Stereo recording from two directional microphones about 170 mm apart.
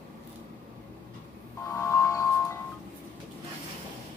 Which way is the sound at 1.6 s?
15° left (ahead or behind).